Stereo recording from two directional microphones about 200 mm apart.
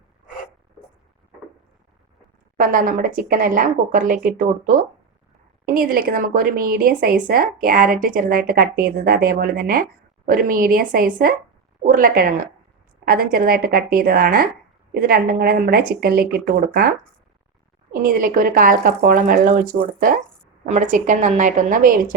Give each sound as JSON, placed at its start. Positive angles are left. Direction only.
{"t": 2.6, "sound": "a woman's voice", "side_deg": -45}
{"t": 17.9, "sound": "a woman's voice", "side_deg": -45}